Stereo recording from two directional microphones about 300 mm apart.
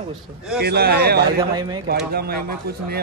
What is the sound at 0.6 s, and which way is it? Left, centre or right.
Speech, right.